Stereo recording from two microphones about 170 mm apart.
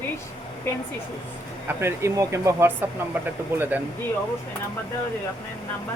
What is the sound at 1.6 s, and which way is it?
Speech, 15° right (ahead or behind).